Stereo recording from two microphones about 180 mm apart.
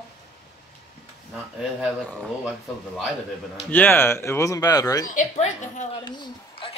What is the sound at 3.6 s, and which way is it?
Speech, 10° left (ahead or behind).